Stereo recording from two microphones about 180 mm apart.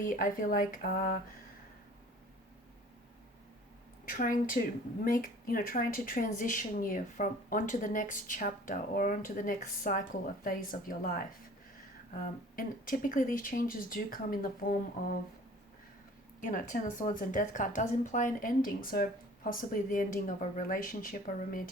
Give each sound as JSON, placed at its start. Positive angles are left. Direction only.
{"t": 0.0, "sound": "speech", "side_deg": 50}
{"t": 4.0, "sound": "a woman's voice", "side_deg": 50}
{"t": 12.2, "sound": "speech", "side_deg": 50}
{"t": 16.4, "sound": "speech", "side_deg": 45}